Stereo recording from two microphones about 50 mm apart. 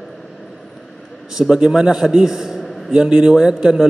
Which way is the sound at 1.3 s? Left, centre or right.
Centre.